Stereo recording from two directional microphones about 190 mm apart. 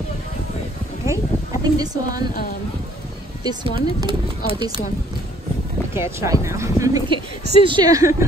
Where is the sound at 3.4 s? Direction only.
20° right (ahead or behind).